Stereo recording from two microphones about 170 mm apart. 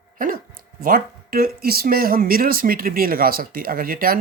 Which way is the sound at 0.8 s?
60° right (ahead or behind).